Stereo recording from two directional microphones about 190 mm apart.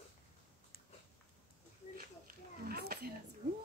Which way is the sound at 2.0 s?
50° right (ahead or behind).